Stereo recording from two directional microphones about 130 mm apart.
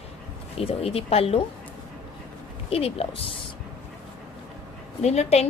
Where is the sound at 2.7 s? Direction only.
50° left (ahead or behind).